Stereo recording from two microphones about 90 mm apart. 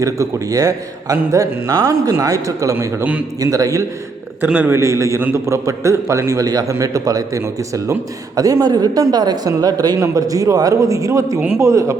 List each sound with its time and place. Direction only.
0.0 s a man's voice: 40° right (ahead or behind)
4.4 s a man's voice: 15° right (ahead or behind)
4.7 s a man's voice: 30° right (ahead or behind)
11.3 s a man's voice: 20° right (ahead or behind)
11.6 s a man's voice: 35° right (ahead or behind)